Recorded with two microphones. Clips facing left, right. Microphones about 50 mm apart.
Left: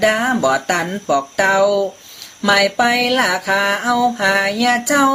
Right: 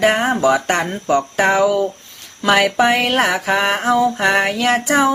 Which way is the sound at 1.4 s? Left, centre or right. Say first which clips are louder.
Left 2 dB; right.